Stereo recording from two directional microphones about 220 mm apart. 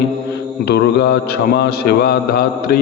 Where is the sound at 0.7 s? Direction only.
50° left (ahead or behind).